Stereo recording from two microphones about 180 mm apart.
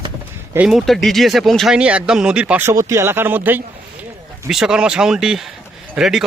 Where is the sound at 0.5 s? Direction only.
5° right (ahead or behind).